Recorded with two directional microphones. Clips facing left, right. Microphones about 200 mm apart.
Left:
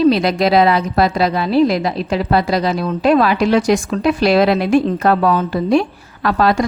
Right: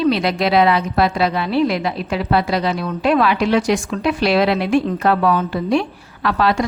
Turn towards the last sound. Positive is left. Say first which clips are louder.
# left 3 dB
turn(degrees=45)  # may be behind; listen again after turning